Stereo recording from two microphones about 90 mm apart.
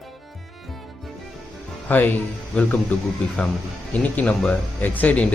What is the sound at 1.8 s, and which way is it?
Speech, 20° left (ahead or behind).